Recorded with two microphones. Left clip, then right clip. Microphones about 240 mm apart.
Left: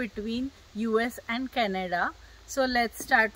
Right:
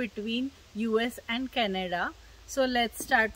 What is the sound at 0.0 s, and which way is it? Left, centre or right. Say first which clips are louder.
Speech: even; centre.